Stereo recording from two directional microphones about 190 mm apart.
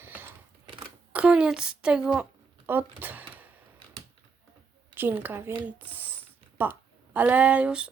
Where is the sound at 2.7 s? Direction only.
10° right (ahead or behind).